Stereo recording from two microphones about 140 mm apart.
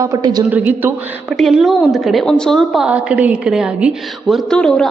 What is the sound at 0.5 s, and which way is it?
Speech, 10° right (ahead or behind).